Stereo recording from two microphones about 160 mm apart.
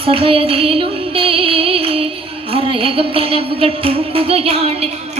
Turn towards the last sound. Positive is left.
turn(degrees=-40)  # may be behind; listen again after turning